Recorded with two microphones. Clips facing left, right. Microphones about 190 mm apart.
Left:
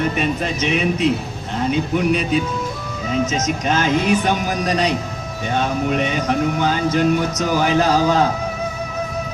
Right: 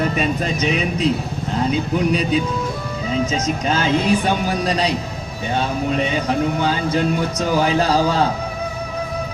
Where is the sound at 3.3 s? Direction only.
35° right (ahead or behind).